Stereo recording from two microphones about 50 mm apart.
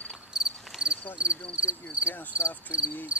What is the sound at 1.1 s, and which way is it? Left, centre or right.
Cricket, right.